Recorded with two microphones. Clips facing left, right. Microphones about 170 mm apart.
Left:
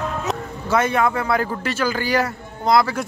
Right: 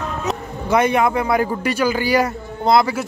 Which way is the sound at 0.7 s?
15° right (ahead or behind).